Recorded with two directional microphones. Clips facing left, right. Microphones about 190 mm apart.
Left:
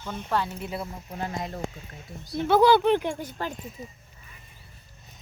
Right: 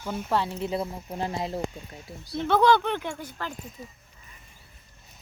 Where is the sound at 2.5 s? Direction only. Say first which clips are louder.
Left 3 dB; 5° left (ahead or behind).